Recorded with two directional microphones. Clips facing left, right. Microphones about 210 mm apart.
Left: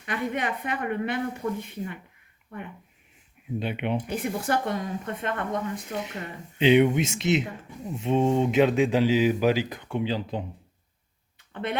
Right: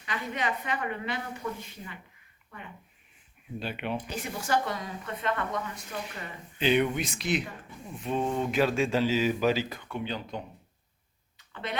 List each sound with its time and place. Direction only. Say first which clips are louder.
0.0 s speech: left 4 dB; 55° left (ahead or behind)
3.6 s speech: left 4 dB; 20° left (ahead or behind)
3.9 s speech: left 6 dB; 55° left (ahead or behind)
5.9 s speech: left 5 dB; 25° left (ahead or behind)
10.1 s speech: left 6 dB; 30° left (ahead or behind)
11.3 s a sound: left 6 dB; 55° left (ahead or behind)